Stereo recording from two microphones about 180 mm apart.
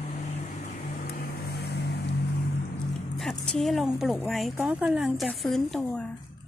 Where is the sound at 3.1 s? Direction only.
5° left (ahead or behind).